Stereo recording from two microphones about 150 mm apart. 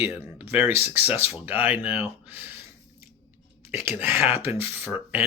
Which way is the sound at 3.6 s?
15° right (ahead or behind).